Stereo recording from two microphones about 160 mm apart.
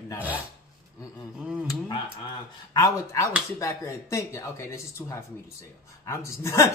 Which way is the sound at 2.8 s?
20° left (ahead or behind).